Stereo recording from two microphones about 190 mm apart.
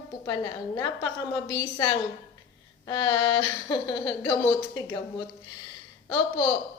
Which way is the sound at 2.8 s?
25° left (ahead or behind).